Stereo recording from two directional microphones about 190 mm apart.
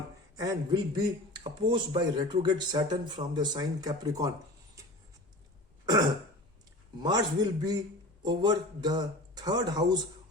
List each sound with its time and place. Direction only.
0.3 s a man's voice: 20° right (ahead or behind)
4.8 s writing: 15° right (ahead or behind)
5.8 s throat clearing: 20° right (ahead or behind)
7.0 s a man's voice: 20° right (ahead or behind)